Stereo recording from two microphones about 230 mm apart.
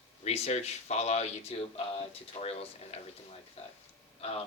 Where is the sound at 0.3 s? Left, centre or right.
Left.